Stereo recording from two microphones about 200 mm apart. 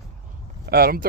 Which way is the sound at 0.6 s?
50° right (ahead or behind).